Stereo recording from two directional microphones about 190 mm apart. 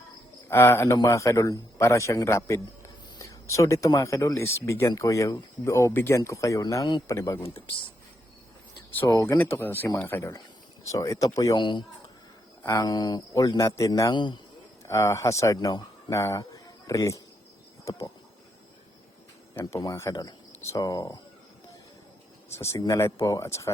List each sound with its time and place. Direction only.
0.4 s a man's voice: 15° left (ahead or behind)
9.0 s a man's voice: 15° left (ahead or behind)
19.5 s a man's voice: 15° left (ahead or behind)
22.5 s a man's voice: 15° left (ahead or behind)